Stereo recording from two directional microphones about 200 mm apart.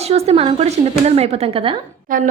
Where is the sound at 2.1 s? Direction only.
45° right (ahead or behind).